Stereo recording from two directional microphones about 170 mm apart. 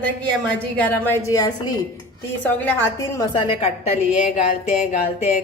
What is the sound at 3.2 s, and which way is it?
Speech, 30° left (ahead or behind).